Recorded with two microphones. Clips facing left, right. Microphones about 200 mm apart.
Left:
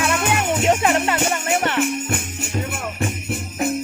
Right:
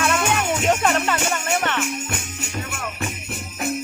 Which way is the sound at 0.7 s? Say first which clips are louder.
Left 2 dB; 20° left (ahead or behind).